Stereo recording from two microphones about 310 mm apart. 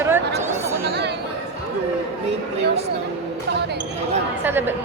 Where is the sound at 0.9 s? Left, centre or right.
Right.